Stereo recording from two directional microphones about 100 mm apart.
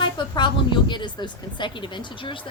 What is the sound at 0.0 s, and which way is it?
A woman's voice, 50° left (ahead or behind).